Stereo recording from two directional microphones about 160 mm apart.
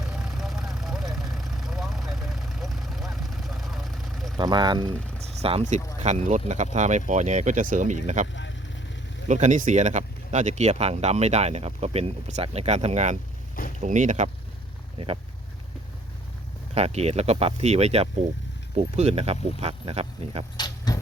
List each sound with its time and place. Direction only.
0.0 s vehicle: centre (ahead or behind)
4.4 s speech: 30° right (ahead or behind)
5.4 s speech: 40° right (ahead or behind)
14.9 s speech: 35° right (ahead or behind)
16.7 s speech: 40° right (ahead or behind)
20.6 s keys jangling: 25° left (ahead or behind)